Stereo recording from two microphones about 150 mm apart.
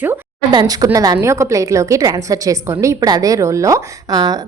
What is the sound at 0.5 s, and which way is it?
A woman's voice, 25° right (ahead or behind).